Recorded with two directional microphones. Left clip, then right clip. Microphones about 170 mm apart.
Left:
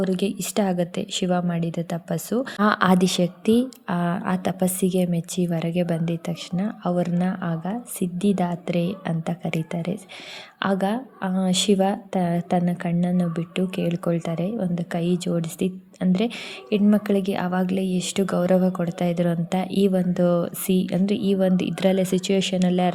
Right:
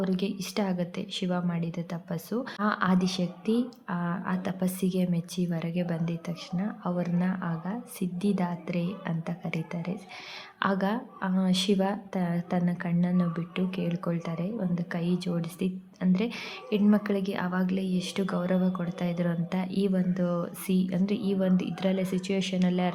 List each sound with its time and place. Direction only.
0.0 s a woman's voice: 30° left (ahead or behind)
2.6 s a woman's voice: 45° left (ahead or behind); by 22.9 s 30° left (ahead or behind)